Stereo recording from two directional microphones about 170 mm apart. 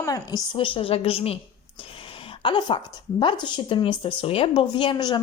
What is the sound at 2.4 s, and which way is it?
Speech, 30° left (ahead or behind).